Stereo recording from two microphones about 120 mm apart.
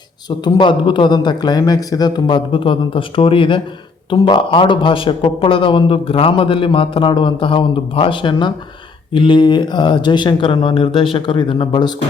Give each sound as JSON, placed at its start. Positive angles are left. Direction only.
{"t": 0.3, "sound": "a man's voice", "side_deg": 40}